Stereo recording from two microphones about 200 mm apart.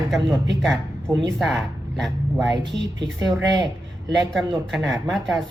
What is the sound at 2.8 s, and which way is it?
Speech, 65° right (ahead or behind).